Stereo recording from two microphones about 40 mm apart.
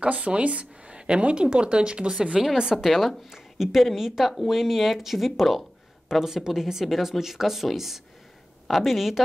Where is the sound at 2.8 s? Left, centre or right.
Centre.